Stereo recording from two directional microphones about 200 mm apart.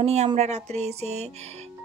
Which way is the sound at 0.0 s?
30° right (ahead or behind).